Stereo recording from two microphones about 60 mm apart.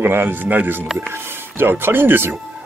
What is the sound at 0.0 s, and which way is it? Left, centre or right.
Speech, right.